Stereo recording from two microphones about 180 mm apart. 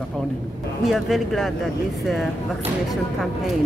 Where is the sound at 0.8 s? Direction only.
Centre (ahead or behind).